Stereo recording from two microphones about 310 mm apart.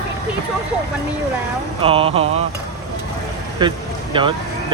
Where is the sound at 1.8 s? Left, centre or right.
Centre.